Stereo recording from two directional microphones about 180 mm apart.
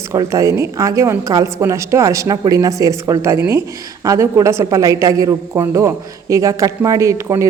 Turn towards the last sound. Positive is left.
turn(degrees=-15)  # may be behind; listen again after turning